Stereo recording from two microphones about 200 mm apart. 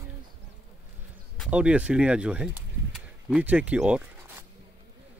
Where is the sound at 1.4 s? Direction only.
5° right (ahead or behind).